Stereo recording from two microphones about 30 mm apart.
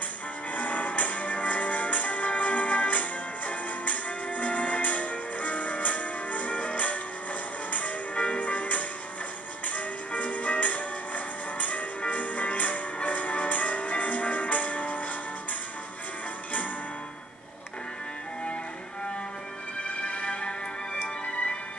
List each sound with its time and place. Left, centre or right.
0.5 s music: left
20.0 s music: left